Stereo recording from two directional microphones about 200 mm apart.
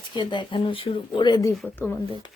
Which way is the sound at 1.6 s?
5° left (ahead or behind).